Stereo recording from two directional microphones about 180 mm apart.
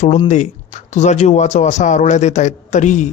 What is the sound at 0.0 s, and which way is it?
Speech, 40° left (ahead or behind).